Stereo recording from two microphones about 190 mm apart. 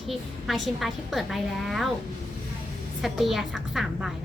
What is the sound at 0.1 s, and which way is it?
A woman's voice, centre (ahead or behind).